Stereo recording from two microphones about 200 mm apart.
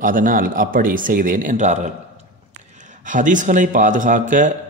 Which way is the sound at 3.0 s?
40° right (ahead or behind).